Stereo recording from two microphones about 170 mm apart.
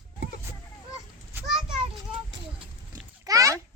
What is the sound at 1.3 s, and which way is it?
Children playing, centre (ahead or behind).